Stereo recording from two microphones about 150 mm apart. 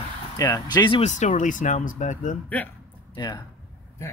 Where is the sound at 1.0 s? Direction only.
50° left (ahead or behind).